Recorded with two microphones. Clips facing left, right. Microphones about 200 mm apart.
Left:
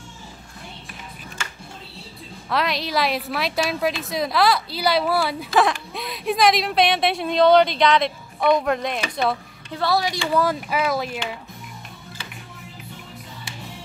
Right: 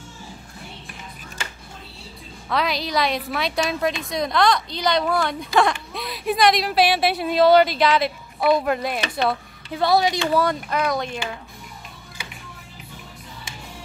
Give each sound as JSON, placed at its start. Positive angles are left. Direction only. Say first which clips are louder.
{"t": 2.5, "sound": "a woman's voice", "louder": "even", "side_deg": 0}
{"t": 9.8, "sound": "speech", "louder": "right 3 dB", "side_deg": -20}
{"t": 10.3, "sound": "a woman's voice", "louder": "even", "side_deg": 5}